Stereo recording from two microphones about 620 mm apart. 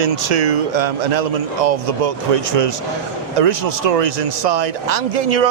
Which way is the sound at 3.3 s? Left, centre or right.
Right.